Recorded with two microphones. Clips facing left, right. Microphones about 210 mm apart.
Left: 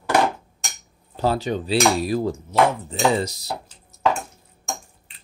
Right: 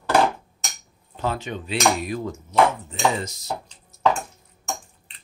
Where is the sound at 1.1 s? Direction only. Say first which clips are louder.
Left 5 dB; 35° left (ahead or behind).